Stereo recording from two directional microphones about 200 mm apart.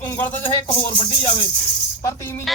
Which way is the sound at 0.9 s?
25° left (ahead or behind).